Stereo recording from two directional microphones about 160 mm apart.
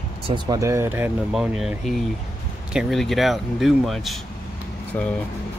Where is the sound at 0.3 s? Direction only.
20° right (ahead or behind).